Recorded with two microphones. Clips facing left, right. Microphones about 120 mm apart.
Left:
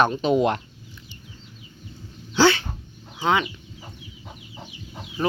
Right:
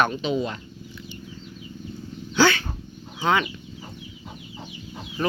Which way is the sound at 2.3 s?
25° left (ahead or behind).